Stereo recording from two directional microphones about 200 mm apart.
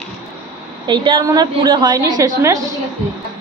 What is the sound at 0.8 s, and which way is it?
A woman's voice, 20° right (ahead or behind).